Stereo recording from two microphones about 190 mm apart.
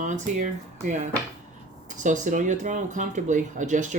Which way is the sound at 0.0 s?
40° right (ahead or behind).